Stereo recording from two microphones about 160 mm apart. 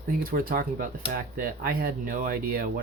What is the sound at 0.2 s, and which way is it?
Speech, 65° right (ahead or behind).